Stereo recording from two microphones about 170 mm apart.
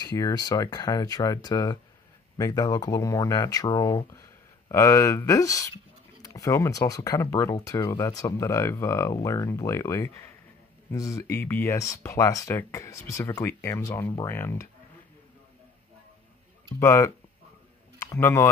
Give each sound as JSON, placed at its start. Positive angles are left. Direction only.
{"t": 0.0, "sound": "speech", "side_deg": 20}
{"t": 16.8, "sound": "speech", "side_deg": 15}